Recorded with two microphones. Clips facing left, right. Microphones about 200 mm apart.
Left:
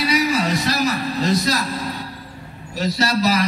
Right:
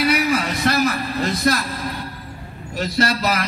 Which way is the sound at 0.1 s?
55° right (ahead or behind).